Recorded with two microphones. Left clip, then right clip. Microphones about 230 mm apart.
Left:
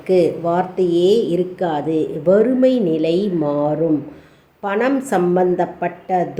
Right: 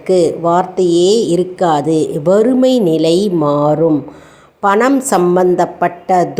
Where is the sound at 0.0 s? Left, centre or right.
Centre.